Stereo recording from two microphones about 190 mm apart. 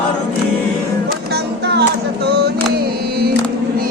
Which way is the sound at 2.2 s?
60° right (ahead or behind).